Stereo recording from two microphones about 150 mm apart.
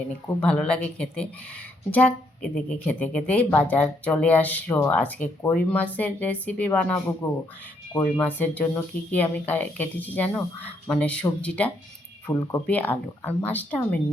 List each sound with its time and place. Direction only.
0.3 s a woman's voice: 10° left (ahead or behind)
7.9 s a woman's voice: 10° left (ahead or behind)
12.3 s a woman's voice: 20° left (ahead or behind)